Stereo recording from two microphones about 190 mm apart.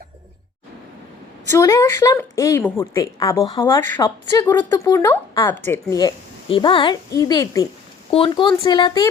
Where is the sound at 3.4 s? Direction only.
30° left (ahead or behind).